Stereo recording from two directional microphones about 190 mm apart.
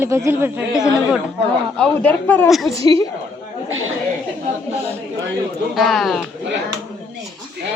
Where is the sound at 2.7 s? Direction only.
20° left (ahead or behind).